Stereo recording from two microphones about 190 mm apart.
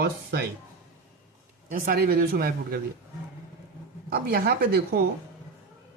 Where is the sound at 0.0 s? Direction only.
60° right (ahead or behind).